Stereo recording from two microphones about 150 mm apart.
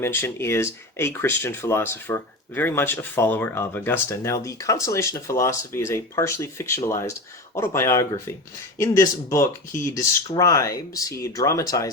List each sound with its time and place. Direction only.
0.0 s speech: 15° left (ahead or behind)